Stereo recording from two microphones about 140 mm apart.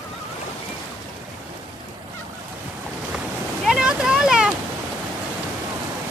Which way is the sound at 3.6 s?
5° right (ahead or behind).